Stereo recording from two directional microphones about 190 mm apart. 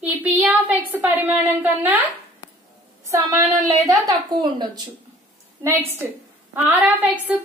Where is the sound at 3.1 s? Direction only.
15° right (ahead or behind).